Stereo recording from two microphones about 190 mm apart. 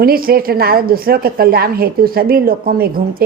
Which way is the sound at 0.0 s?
50° right (ahead or behind).